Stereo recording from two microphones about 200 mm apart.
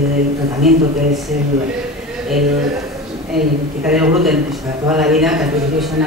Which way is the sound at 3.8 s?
5° right (ahead or behind).